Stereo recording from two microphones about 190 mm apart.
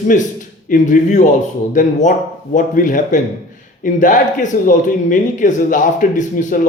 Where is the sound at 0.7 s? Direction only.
40° left (ahead or behind).